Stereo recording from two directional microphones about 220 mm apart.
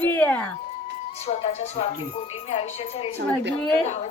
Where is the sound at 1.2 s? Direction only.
30° left (ahead or behind).